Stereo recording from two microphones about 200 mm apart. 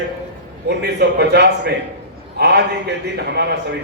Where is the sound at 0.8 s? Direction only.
55° right (ahead or behind).